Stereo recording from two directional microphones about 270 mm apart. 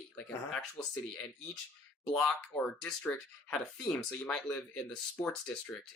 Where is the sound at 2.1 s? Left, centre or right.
Centre.